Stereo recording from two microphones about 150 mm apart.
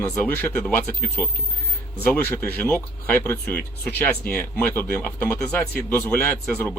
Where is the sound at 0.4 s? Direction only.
15° left (ahead or behind).